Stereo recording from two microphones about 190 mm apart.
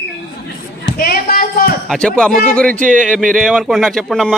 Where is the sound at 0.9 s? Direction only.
50° left (ahead or behind).